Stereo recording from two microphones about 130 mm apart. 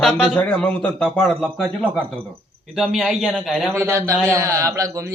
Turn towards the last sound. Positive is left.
turn(degrees=-20)  # may be behind; listen again after turning